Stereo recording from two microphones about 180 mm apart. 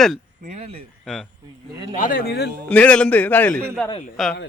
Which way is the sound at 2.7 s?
5° left (ahead or behind).